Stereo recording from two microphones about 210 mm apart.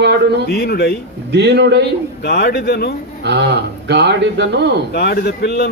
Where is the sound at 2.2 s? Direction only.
50° left (ahead or behind).